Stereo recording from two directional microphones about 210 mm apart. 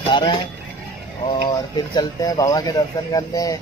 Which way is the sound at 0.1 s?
20° left (ahead or behind).